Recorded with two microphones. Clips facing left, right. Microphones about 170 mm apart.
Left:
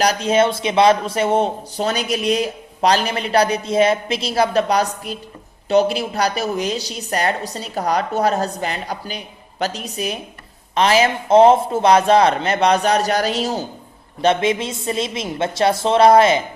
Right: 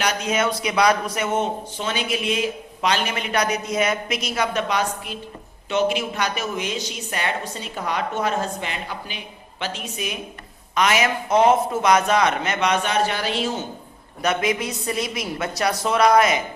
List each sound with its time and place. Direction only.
0.0 s a man's voice: 35° left (ahead or behind)